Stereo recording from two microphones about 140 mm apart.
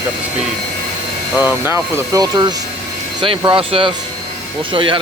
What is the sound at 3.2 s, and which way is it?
Speech, 35° right (ahead or behind).